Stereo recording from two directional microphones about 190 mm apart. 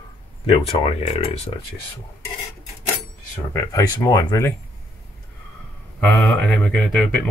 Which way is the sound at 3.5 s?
15° left (ahead or behind).